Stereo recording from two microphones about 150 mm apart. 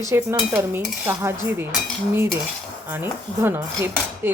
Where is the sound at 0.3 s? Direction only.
15° right (ahead or behind).